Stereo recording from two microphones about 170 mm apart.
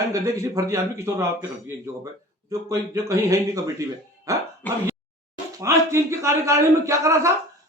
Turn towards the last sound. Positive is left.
turn(degrees=-20)  # may be behind; listen again after turning